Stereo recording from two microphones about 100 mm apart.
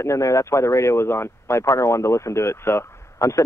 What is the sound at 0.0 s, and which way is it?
A man's voice, 30° left (ahead or behind).